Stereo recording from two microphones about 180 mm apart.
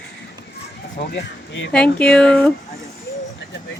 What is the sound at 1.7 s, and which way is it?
Speech, 5° left (ahead or behind).